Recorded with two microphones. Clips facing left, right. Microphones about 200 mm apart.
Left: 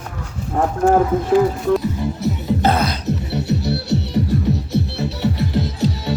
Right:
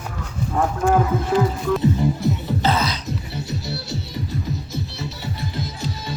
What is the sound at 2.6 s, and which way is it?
Music, 55° left (ahead or behind).